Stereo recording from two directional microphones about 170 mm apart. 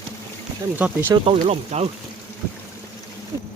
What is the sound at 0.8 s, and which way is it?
Speech, 10° right (ahead or behind).